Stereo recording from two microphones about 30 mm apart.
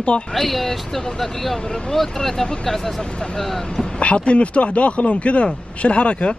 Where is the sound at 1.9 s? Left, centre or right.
Centre.